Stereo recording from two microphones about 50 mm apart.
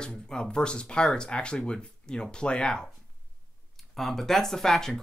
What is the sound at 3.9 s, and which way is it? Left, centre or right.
Speech, centre.